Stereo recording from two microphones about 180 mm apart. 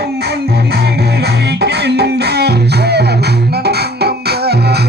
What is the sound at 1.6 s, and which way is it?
Music, 70° right (ahead or behind).